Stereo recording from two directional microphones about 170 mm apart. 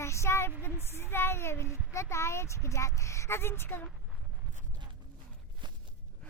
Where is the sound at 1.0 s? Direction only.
15° left (ahead or behind).